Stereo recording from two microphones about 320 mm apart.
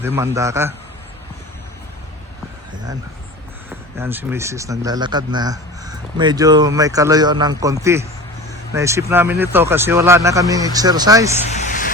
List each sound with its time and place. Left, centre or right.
0.0 s speech: centre
3.9 s speech: centre
11.5 s a sound: left